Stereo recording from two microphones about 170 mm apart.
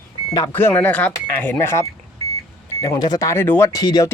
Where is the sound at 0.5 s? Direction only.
10° left (ahead or behind).